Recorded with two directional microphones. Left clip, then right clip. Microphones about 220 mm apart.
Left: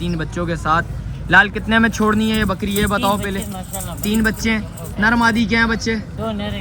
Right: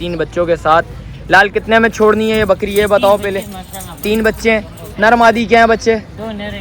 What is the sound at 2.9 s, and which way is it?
Speech, 20° left (ahead or behind).